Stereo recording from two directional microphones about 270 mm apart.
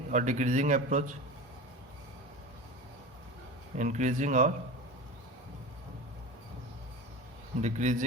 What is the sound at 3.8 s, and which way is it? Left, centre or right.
Speech, right.